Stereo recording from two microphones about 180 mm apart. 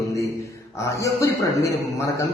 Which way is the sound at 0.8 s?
15° left (ahead or behind).